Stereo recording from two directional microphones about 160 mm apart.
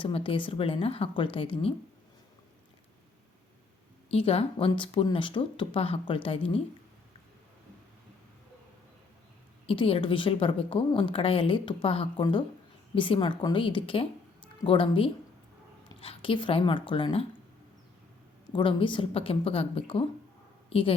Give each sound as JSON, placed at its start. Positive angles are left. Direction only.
{"t": 0.0, "sound": "a woman's voice", "side_deg": 35}
{"t": 4.1, "sound": "a woman's voice", "side_deg": 35}
{"t": 9.6, "sound": "a woman's voice", "side_deg": 35}
{"t": 18.5, "sound": "a woman's voice", "side_deg": 30}